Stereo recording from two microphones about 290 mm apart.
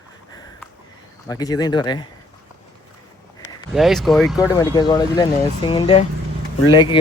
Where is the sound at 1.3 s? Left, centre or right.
Centre.